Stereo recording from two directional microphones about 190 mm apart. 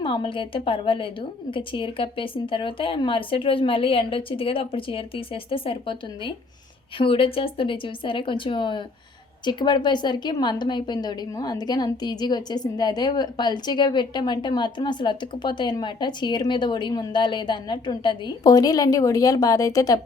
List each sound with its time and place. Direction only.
0.0 s a woman's voice: 25° left (ahead or behind)